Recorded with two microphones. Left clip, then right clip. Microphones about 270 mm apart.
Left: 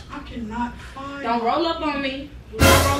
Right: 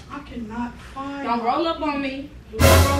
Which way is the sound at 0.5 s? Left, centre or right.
Centre.